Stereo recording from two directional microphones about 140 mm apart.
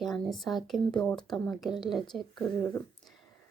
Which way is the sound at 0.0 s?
Centre (ahead or behind).